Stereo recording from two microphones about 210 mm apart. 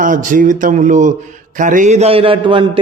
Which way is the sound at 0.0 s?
40° right (ahead or behind).